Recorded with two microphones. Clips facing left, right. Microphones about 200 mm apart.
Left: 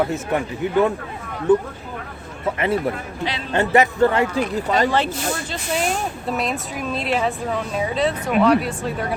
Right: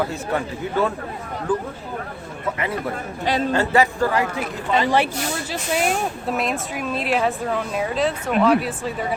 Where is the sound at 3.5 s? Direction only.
20° left (ahead or behind).